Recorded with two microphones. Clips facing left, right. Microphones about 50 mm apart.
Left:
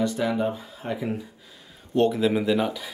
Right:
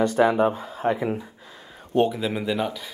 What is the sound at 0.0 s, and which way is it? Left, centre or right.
Speech, right.